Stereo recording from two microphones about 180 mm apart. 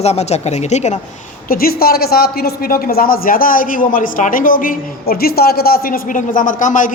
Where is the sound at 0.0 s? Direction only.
35° left (ahead or behind).